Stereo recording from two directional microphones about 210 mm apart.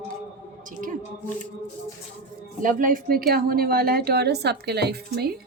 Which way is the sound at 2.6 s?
40° right (ahead or behind).